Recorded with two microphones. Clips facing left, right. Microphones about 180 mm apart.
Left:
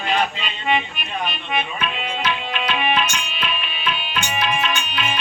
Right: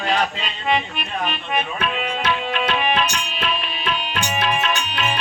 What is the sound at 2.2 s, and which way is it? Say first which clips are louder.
Tabla: right 2 dB; 45° right (ahead or behind).